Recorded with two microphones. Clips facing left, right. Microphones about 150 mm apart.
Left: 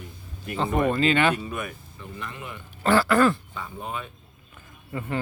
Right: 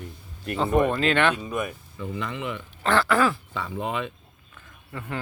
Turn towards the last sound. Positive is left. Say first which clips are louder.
# left 4 dB
turn(degrees=5)  # may be behind; listen again after turning